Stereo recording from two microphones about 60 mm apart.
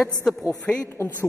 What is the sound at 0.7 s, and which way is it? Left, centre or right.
Speech, left.